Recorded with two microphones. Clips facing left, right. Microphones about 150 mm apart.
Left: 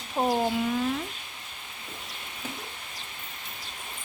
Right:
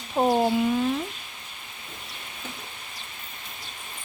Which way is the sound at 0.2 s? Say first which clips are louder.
Right 4 dB; 25° right (ahead or behind).